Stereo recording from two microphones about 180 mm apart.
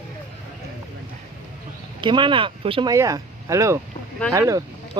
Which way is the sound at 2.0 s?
25° right (ahead or behind).